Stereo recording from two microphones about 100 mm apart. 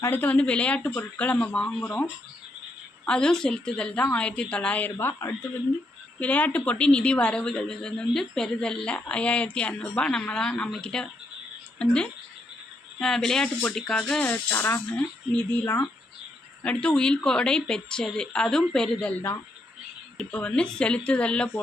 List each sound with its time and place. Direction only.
0.0 s a woman's voice: 20° left (ahead or behind)
3.1 s a woman's voice: 5° left (ahead or behind); by 5.5 s 25° left (ahead or behind)
6.1 s a woman's voice: 15° left (ahead or behind)
13.0 s a woman's voice: 5° left (ahead or behind)
14.3 s speech: 20° left (ahead or behind)
16.6 s a woman's voice: 10° left (ahead or behind)
20.3 s a woman's voice: 10° left (ahead or behind)